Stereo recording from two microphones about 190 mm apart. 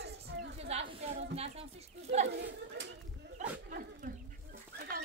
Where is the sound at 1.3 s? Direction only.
30° right (ahead or behind).